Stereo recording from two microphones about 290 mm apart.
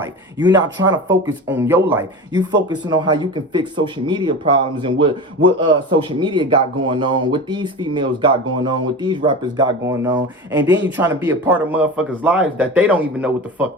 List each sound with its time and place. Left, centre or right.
0.0 s a man's voice: centre